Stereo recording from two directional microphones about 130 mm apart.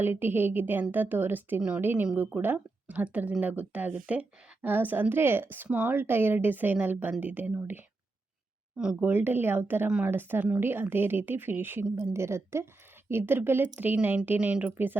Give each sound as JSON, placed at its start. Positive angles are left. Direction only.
{"t": 0.0, "sound": "speech", "side_deg": -15}
{"t": 9.0, "sound": "speech", "side_deg": -15}